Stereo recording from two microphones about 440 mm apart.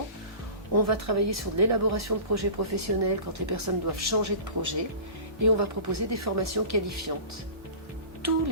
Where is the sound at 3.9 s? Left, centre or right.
Right.